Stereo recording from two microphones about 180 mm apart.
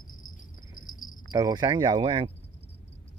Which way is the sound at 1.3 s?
20° right (ahead or behind).